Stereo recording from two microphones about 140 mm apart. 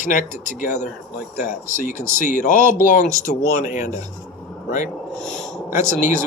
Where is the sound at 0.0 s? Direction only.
65° left (ahead or behind).